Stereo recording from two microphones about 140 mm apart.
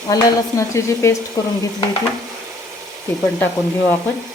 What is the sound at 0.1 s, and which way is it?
Speech, 20° left (ahead or behind).